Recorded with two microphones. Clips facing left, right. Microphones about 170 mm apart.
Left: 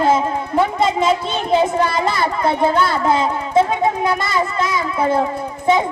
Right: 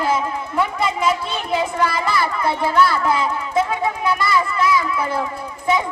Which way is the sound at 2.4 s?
25° left (ahead or behind).